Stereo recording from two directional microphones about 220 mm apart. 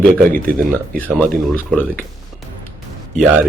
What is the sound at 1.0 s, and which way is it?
Speech, 5° left (ahead or behind).